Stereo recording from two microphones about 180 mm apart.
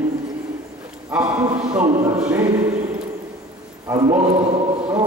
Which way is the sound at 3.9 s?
20° right (ahead or behind).